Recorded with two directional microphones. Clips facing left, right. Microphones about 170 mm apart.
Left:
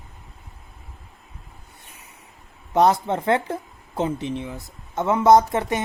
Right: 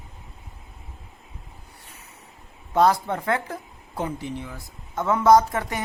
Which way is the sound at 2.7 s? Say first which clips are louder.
Left 2 dB; 20° left (ahead or behind).